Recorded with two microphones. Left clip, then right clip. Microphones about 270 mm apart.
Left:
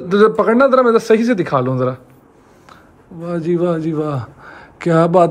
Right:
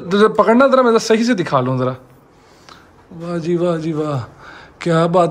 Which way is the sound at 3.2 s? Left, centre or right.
Centre.